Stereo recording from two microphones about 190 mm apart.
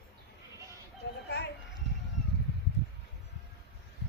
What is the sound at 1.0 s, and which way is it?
Children playing, 65° left (ahead or behind).